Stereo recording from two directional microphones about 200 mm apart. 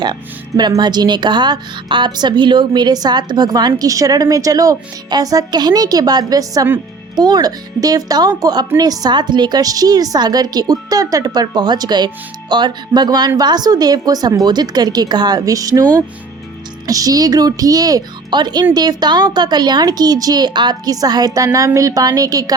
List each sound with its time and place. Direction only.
0.0 s a woman's voice: 20° right (ahead or behind)